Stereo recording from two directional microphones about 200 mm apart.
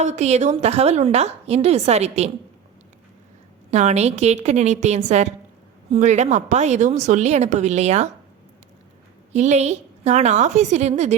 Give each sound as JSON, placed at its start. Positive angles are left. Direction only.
{"t": 0.0, "sound": "a woman's voice", "side_deg": -35}
{"t": 3.7, "sound": "a woman's voice", "side_deg": -35}
{"t": 9.3, "sound": "a woman's voice", "side_deg": -35}